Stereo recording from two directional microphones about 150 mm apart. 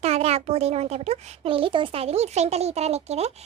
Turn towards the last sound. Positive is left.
turn(degrees=-45)  # may be behind; listen again after turning